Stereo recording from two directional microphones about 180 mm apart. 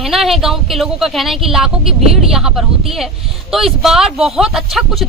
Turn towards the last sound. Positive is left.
turn(degrees=0)  # may be behind; listen again after turning